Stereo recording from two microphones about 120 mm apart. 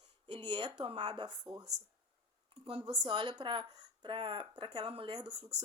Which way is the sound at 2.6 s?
45° right (ahead or behind).